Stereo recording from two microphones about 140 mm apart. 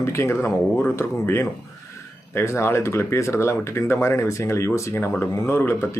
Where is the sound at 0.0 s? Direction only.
20° left (ahead or behind).